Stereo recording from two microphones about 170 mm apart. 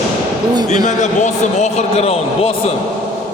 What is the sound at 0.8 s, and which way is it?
A man's voice, 45° left (ahead or behind).